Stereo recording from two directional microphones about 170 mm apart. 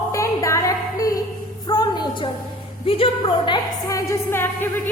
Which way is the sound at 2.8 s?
30° left (ahead or behind).